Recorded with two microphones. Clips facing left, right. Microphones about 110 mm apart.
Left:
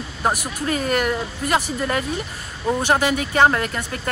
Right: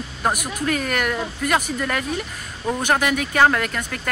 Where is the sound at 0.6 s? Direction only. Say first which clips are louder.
Left 2 dB; 35° left (ahead or behind).